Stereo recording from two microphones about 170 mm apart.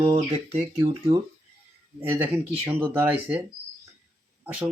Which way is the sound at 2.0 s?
10° right (ahead or behind).